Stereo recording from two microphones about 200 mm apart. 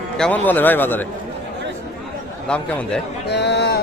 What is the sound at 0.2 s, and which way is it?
Speech, 10° left (ahead or behind).